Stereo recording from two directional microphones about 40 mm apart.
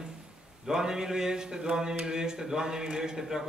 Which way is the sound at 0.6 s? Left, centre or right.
Centre.